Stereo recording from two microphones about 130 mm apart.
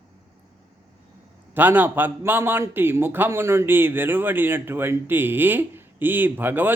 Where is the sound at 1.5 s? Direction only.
15° right (ahead or behind).